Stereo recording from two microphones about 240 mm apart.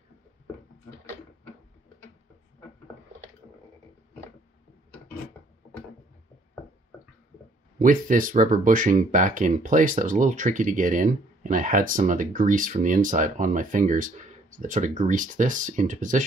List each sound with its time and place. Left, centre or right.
7.8 s speech: right